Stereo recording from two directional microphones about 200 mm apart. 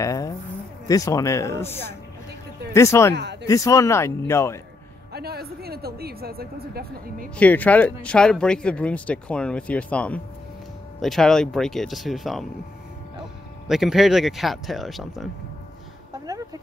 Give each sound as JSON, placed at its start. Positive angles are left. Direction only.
{"t": 0.0, "sound": "speech", "side_deg": 15}
{"t": 5.1, "sound": "a woman's voice", "side_deg": -50}
{"t": 7.3, "sound": "speech", "side_deg": 10}
{"t": 13.7, "sound": "speech", "side_deg": 0}